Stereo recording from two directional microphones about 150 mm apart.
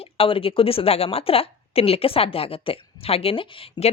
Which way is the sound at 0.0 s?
35° left (ahead or behind).